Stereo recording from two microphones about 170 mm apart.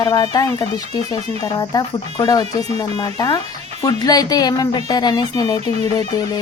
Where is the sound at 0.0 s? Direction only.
25° left (ahead or behind).